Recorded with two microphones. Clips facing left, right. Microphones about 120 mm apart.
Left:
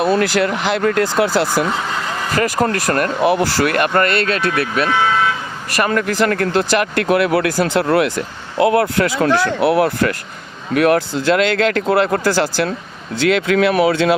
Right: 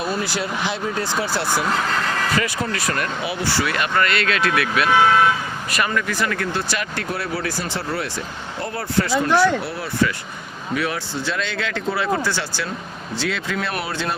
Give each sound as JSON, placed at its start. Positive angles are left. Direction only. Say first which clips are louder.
{"t": 0.0, "sound": "speech", "louder": "left 9 dB", "side_deg": 60}
{"t": 1.6, "sound": "speech", "louder": "left 1 dB", "side_deg": 5}
{"t": 2.3, "sound": "speech", "louder": "left 6 dB", "side_deg": 45}
{"t": 4.4, "sound": "speech", "louder": "left 2 dB", "side_deg": 30}
{"t": 4.9, "sound": "speech", "louder": "right 4 dB", "side_deg": -15}
{"t": 5.8, "sound": "speech", "louder": "left 7 dB", "side_deg": 50}
{"t": 6.6, "sound": "speech", "louder": "left 9 dB", "side_deg": 65}
{"t": 9.6, "sound": "speech", "louder": "left 9 dB", "side_deg": 65}
{"t": 13.2, "sound": "speech", "louder": "left 12 dB", "side_deg": 75}